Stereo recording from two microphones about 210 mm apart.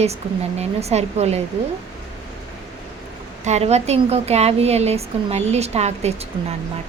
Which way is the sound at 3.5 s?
30° right (ahead or behind).